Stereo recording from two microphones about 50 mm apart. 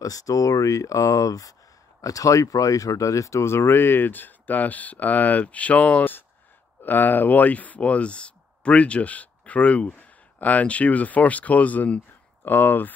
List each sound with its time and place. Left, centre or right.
0.6 s speech: left
2.2 s speech: left
6.8 s speech: left